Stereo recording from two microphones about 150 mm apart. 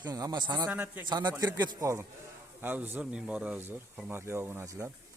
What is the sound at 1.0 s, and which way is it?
Speech, 30° right (ahead or behind).